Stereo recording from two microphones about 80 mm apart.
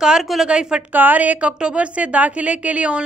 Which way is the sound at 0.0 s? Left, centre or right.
Centre.